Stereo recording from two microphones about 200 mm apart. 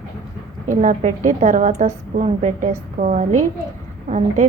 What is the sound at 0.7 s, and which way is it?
A woman's voice, 40° right (ahead or behind).